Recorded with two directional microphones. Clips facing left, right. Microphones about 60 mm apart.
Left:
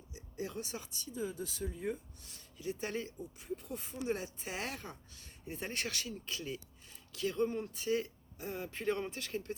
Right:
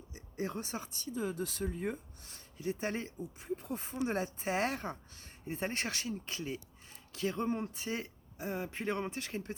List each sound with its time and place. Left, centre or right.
0.1 s speech: right
2.2 s speech: right